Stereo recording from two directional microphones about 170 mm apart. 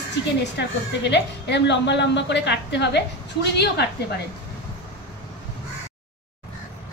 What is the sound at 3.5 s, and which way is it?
Speech, 75° left (ahead or behind).